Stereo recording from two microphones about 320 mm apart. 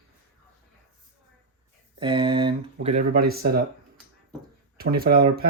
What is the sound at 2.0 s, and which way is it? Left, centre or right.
Speech, centre.